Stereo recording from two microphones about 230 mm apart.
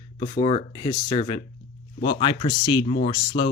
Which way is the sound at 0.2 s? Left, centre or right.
Left.